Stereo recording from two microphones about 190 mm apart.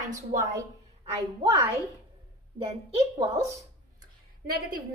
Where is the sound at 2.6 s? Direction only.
30° right (ahead or behind).